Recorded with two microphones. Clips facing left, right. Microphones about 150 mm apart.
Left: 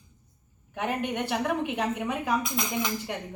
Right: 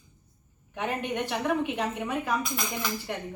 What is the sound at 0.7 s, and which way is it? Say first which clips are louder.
A woman's voice: left 1 dB; 10° left (ahead or behind).